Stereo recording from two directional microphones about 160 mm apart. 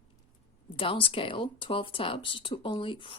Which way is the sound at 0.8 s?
35° left (ahead or behind).